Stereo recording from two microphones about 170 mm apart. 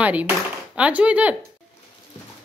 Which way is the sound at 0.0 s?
10° right (ahead or behind).